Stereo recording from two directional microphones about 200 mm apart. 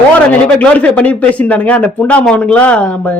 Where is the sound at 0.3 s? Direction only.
5° left (ahead or behind).